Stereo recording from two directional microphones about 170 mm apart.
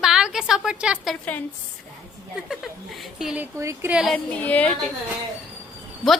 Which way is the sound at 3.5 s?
15° right (ahead or behind).